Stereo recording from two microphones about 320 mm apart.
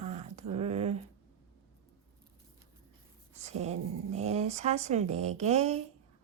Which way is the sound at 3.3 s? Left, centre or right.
Right.